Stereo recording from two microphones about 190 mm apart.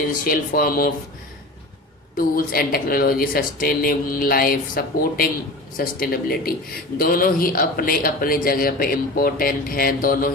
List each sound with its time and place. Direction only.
0.1 s speech: 50° left (ahead or behind)
2.1 s speech: 50° left (ahead or behind)